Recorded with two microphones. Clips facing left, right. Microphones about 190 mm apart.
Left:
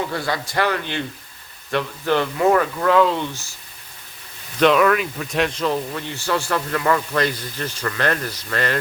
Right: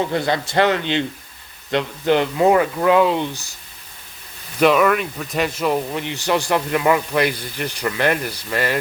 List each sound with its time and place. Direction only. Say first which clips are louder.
0.1 s a man's voice: right 4 dB; 20° right (ahead or behind)
4.6 s speech: even; 5° right (ahead or behind)